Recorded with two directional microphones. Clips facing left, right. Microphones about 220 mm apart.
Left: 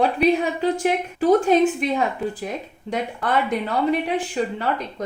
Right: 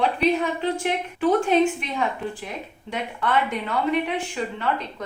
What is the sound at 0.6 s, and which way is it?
A woman's voice, 40° left (ahead or behind).